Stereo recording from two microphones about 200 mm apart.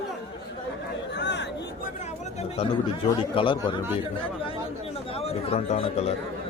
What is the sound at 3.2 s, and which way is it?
Speech, 25° left (ahead or behind).